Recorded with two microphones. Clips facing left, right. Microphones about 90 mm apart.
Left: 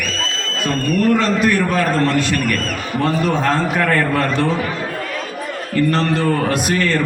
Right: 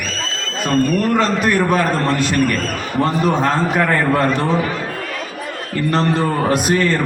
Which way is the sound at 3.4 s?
15° right (ahead or behind).